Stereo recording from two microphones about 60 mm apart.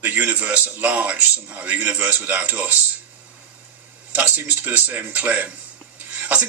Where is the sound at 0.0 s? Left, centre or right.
Right.